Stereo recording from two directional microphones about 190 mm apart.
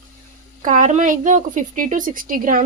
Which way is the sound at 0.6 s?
40° right (ahead or behind).